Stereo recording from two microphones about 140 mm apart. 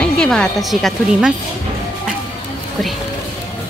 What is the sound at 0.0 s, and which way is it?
Speech, 5° left (ahead or behind).